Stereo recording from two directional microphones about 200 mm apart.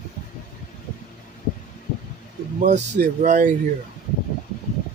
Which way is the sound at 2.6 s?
40° right (ahead or behind).